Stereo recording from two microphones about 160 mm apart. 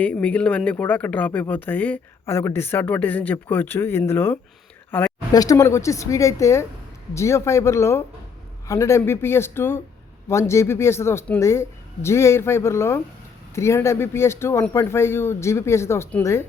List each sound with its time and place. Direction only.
0.0 s speech: 10° left (ahead or behind)
5.3 s a woman's voice: 25° left (ahead or behind)